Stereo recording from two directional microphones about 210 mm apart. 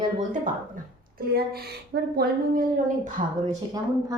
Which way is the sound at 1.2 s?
45° right (ahead or behind).